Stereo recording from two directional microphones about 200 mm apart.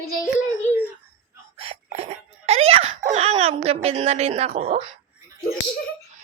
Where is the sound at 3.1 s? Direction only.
30° right (ahead or behind).